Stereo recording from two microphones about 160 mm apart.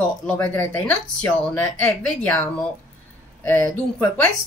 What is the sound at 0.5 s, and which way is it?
Speech, 10° left (ahead or behind).